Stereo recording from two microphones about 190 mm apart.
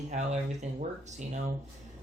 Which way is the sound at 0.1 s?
35° right (ahead or behind).